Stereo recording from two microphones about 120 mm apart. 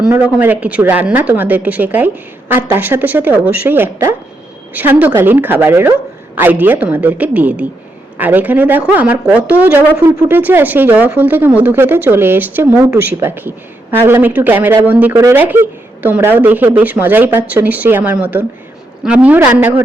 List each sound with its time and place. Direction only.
0.1 s speech: 15° right (ahead or behind)